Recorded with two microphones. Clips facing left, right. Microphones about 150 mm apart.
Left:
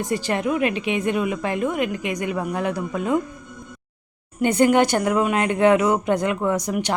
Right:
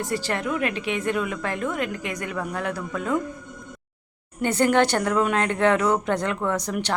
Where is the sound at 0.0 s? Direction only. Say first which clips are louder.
Left 4 dB; 20° left (ahead or behind).